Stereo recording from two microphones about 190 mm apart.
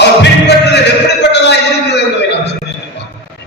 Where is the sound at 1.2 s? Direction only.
65° left (ahead or behind).